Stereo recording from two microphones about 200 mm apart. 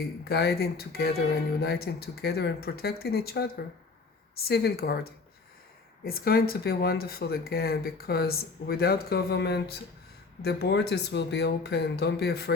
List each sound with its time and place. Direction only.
0.3 s speech: 55° left (ahead or behind)
6.1 s speech: 50° left (ahead or behind)